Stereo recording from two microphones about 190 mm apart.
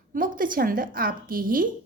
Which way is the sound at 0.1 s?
45° right (ahead or behind).